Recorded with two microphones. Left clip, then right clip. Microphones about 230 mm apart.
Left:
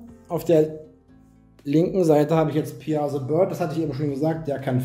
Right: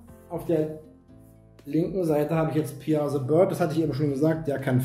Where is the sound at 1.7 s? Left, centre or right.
Left.